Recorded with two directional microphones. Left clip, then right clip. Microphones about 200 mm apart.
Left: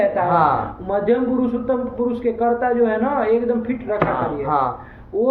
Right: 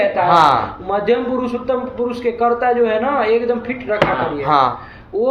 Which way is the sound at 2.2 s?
5° right (ahead or behind).